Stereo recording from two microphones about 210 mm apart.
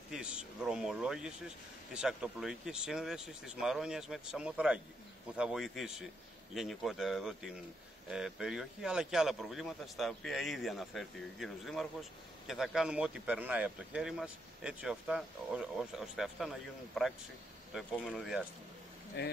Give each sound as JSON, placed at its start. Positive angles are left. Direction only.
{"t": 0.1, "sound": "a man's voice", "side_deg": -5}
{"t": 19.2, "sound": "speech", "side_deg": 50}